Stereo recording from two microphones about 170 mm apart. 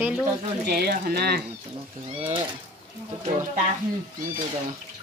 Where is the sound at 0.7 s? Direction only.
60° right (ahead or behind).